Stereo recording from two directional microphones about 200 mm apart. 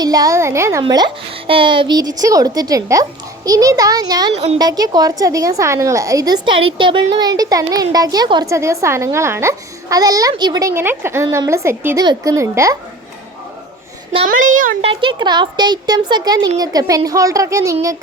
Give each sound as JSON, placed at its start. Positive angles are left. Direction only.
{"t": 0.0, "sound": "a child's voice", "side_deg": -20}
{"t": 14.1, "sound": "a child's voice", "side_deg": -35}